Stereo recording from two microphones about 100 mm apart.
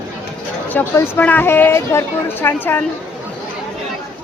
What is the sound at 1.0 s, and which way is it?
A woman's voice, 20° left (ahead or behind).